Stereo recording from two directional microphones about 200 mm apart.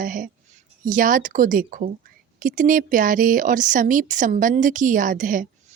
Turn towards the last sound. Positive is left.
turn(degrees=-40)  # may be behind; listen again after turning